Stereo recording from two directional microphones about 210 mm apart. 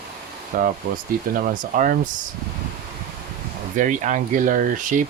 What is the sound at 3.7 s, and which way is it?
Speech, 35° right (ahead or behind).